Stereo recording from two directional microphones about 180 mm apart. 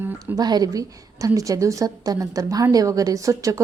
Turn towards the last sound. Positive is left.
turn(degrees=-20)  # may be behind; listen again after turning